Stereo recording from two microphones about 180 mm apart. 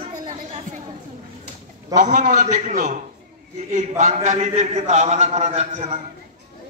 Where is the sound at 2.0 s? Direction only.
45° right (ahead or behind).